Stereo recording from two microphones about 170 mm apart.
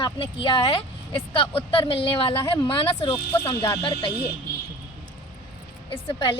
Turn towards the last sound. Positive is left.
turn(degrees=30)  # may be behind; listen again after turning